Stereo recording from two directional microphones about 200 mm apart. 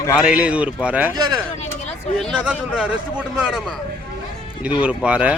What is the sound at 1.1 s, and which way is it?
Speech, 20° right (ahead or behind).